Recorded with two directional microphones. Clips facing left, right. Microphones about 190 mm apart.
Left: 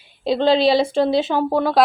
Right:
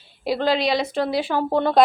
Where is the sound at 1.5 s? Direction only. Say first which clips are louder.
Right 1 dB; 5° left (ahead or behind).